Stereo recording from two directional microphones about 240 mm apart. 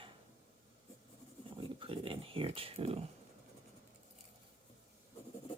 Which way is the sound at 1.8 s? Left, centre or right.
Right.